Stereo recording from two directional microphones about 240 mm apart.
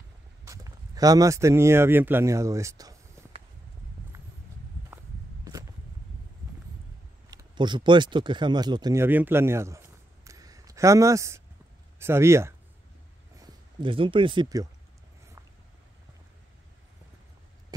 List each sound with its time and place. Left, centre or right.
0.5 s speech: centre
4.9 s walk: centre
7.2 s speech: centre